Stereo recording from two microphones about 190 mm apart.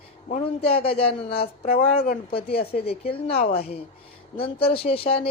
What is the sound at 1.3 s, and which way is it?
Speech, 55° left (ahead or behind).